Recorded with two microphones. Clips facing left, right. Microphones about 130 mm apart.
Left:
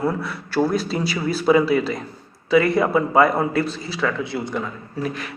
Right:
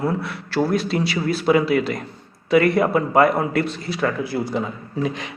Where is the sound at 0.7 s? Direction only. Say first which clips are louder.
Right 2 dB; 40° left (ahead or behind).